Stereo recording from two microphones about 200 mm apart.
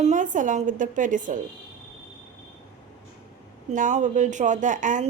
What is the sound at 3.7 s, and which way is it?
A woman's voice, 40° right (ahead or behind).